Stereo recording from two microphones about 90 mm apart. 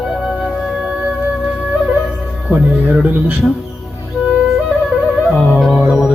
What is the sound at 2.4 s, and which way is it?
Music, 10° right (ahead or behind).